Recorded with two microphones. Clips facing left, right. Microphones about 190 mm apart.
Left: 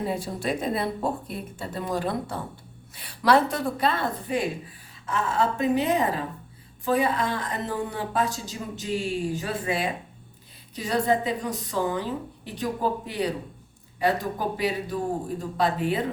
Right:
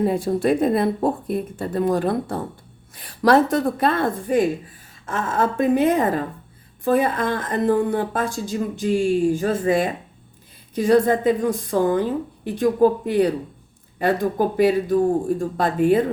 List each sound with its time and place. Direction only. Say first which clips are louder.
0.0 s speech: right 9 dB; 50° right (ahead or behind)